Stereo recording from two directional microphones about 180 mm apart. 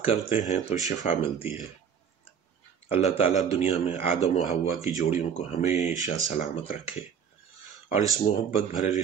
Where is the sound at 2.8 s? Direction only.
30° left (ahead or behind).